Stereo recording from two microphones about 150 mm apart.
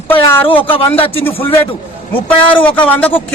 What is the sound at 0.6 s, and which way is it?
Speech, 35° left (ahead or behind).